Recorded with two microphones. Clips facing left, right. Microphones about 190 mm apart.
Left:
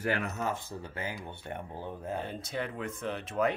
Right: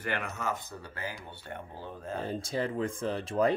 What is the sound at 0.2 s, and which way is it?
Speech, 40° left (ahead or behind).